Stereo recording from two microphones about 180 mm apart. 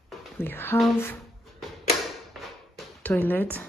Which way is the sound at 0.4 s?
10° left (ahead or behind).